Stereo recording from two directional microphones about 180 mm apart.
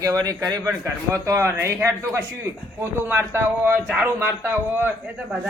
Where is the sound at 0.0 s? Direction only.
20° right (ahead or behind).